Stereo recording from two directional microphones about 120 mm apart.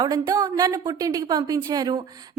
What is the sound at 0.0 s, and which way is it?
A woman's voice, 30° right (ahead or behind).